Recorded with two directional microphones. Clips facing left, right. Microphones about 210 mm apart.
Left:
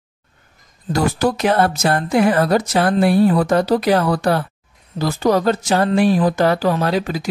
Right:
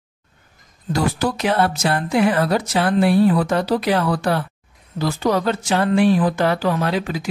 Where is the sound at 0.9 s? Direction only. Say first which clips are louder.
Left 3 dB; 45° left (ahead or behind).